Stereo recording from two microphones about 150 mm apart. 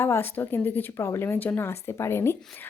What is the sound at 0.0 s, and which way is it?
A woman's voice, 15° left (ahead or behind).